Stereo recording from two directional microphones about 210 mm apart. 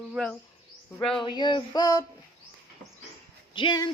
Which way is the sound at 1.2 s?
20° left (ahead or behind).